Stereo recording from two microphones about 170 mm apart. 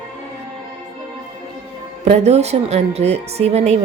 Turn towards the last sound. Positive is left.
turn(degrees=-40)  # may be behind; listen again after turning